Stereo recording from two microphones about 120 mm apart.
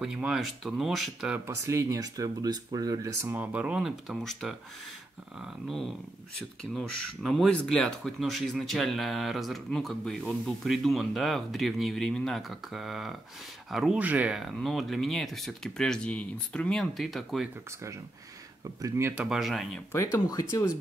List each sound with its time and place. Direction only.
0.0 s speech: 5° right (ahead or behind)
1.4 s speech: 25° right (ahead or behind); by 4.6 s centre (ahead or behind)
6.7 s speech: centre (ahead or behind)
14.4 s speech: centre (ahead or behind)
18.8 s speech: 20° right (ahead or behind)
19.1 s speech: 5° right (ahead or behind)
19.9 s speech: 25° left (ahead or behind)